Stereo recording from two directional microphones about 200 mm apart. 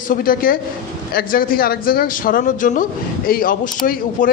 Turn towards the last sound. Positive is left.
turn(degrees=45)  # may be behind; listen again after turning